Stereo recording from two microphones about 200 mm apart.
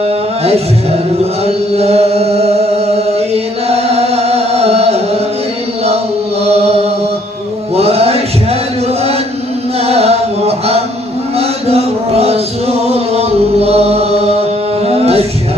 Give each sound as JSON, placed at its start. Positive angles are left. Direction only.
{"t": 1.5, "sound": "chant", "side_deg": -30}
{"t": 7.8, "sound": "music", "side_deg": -30}
{"t": 9.8, "sound": "chant", "side_deg": -30}
{"t": 11.3, "sound": "music", "side_deg": -30}